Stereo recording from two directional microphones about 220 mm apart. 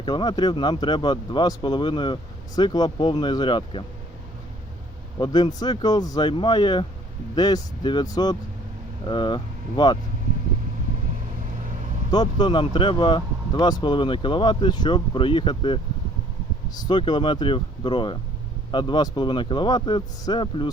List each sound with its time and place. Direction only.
0.0 s speech: 20° left (ahead or behind)
5.2 s speech: 20° left (ahead or behind)
12.1 s speech: 20° left (ahead or behind)